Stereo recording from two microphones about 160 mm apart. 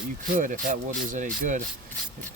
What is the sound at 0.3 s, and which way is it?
Speech, 55° right (ahead or behind).